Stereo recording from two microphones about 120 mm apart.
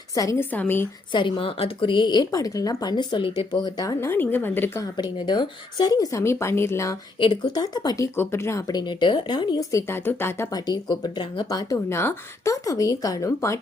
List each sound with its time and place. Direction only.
0.1 s a woman's voice: 30° left (ahead or behind)
0.5 s speech: 15° left (ahead or behind)
1.1 s speech: 45° left (ahead or behind)
3.6 s speech: 30° left (ahead or behind)
5.2 s a woman's voice: 40° left (ahead or behind); by 6.9 s 20° left (ahead or behind)
7.2 s speech: 35° left (ahead or behind); by 10.5 s 20° left (ahead or behind)
10.5 s speech: 35° left (ahead or behind)
11.4 s a woman's voice: 30° left (ahead or behind)